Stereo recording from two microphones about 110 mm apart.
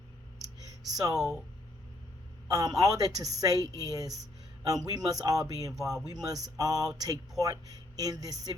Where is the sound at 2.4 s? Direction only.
35° right (ahead or behind).